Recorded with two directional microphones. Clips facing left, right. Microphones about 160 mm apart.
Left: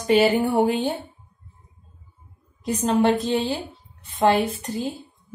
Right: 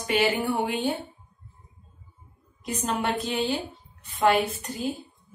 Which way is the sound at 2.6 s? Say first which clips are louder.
Left 8 dB; 35° left (ahead or behind).